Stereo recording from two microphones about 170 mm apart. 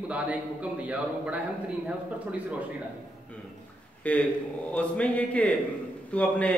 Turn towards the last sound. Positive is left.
turn(degrees=10)  # may be behind; listen again after turning